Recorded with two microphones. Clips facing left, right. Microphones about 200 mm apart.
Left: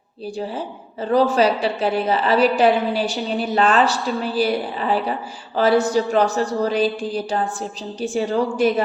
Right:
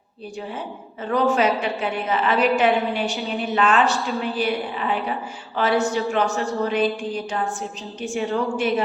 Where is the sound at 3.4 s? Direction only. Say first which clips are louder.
Left 2 dB; 35° left (ahead or behind).